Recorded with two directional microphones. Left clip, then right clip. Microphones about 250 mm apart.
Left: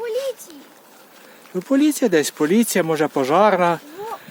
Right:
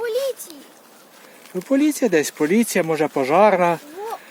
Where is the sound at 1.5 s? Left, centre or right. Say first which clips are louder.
Left 1 dB; centre.